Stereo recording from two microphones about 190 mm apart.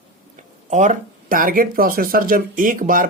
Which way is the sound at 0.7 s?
40° right (ahead or behind).